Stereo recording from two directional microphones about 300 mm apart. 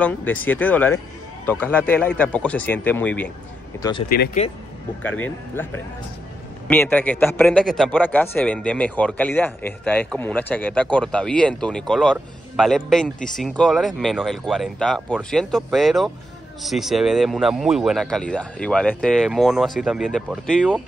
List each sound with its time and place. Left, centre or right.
0.0 s a man's voice: centre
4.1 s speech: left
5.0 s a man's voice: centre
6.7 s a man's voice: centre